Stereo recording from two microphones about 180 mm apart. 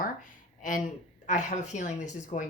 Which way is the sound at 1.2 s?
45° left (ahead or behind).